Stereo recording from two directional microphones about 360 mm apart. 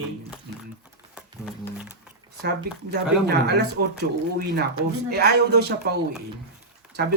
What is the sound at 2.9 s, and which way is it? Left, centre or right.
Speech, right.